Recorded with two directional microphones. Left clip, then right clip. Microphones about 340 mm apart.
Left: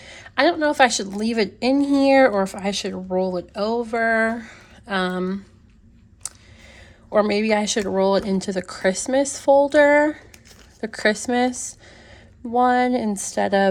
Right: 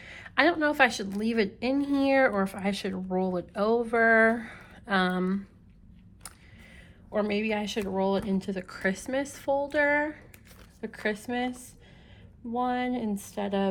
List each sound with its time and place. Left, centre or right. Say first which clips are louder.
0.0 s a woman's voice: left 5 dB; centre
6.2 s a sound: left 11 dB; centre
6.7 s a woman's voice: left 11 dB; centre